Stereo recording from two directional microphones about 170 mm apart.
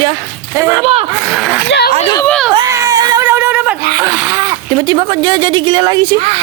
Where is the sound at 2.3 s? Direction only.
Centre (ahead or behind).